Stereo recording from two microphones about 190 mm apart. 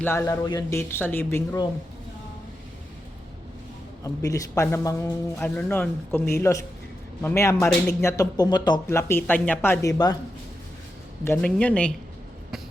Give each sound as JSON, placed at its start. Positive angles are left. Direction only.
{"t": 0.0, "sound": "a man's voice", "side_deg": 15}
{"t": 4.0, "sound": "a man's voice", "side_deg": 15}
{"t": 5.4, "sound": "a man's voice", "side_deg": 5}
{"t": 11.3, "sound": "a man's voice", "side_deg": 5}